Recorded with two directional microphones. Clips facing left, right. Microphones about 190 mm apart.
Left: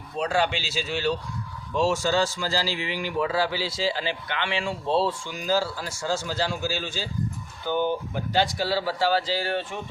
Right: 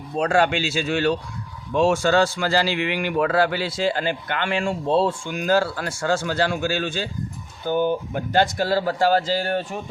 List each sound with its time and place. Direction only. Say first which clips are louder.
0.2 s a man's voice: right 5 dB; 50° right (ahead or behind)
7.6 s speech: right 4 dB; 45° right (ahead or behind)